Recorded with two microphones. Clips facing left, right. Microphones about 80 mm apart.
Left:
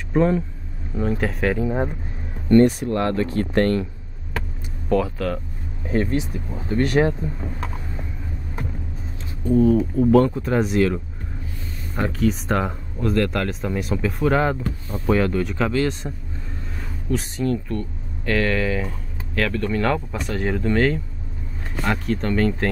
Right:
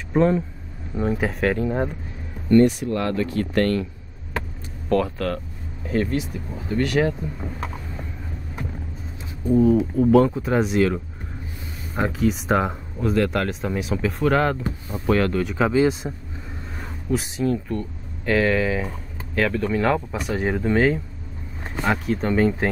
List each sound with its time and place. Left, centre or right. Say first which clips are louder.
0.1 s speech: even; centre
2.5 s speech: left 1 dB; left
4.8 s speech: even; centre
5.9 s speech: left 1 dB; left
7.3 s speech: even; centre
9.5 s speech: even; centre
15.5 s speech: right 3 dB; centre
17.1 s speech: even; centre